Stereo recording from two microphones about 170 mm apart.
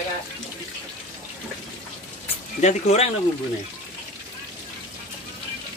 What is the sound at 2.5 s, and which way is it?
Speech, 40° left (ahead or behind).